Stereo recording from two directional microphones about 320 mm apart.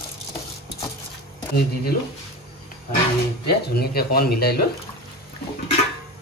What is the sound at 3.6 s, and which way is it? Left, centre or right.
Speech, left.